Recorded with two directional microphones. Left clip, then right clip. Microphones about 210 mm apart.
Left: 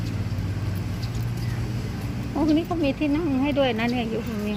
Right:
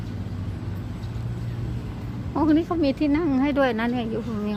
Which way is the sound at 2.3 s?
30° right (ahead or behind).